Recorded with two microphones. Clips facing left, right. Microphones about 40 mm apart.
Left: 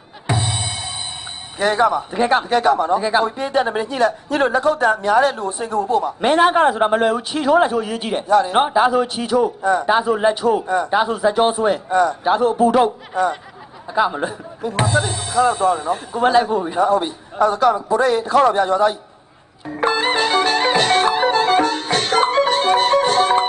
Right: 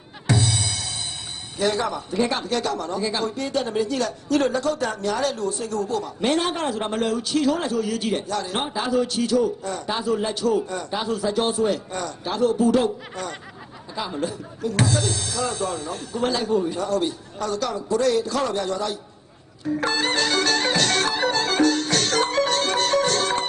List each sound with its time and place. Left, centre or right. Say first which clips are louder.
0.3 s music: left 1 dB; left
1.6 s a man's voice: left 7 dB; left
19.6 s music: left 4 dB; left